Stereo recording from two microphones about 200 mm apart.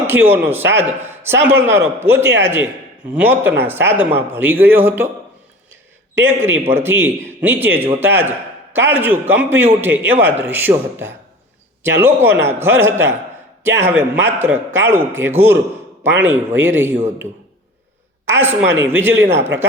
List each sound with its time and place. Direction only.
0.1 s a man's voice: 10° right (ahead or behind)
6.1 s a man's voice: 10° right (ahead or behind)
18.3 s a man's voice: 10° right (ahead or behind)